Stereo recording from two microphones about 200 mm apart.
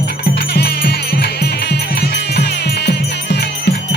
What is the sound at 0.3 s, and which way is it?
Music, 55° left (ahead or behind).